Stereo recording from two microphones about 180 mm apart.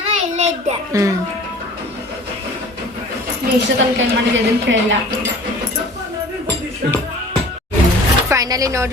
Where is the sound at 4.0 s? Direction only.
90° right.